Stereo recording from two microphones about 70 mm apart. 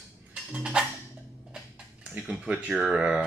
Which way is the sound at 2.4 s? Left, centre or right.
Centre.